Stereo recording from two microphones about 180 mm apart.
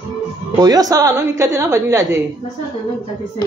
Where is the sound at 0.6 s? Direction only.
20° right (ahead or behind).